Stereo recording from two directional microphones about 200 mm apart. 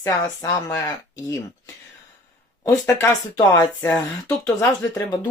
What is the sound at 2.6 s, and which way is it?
Speech, 15° left (ahead or behind).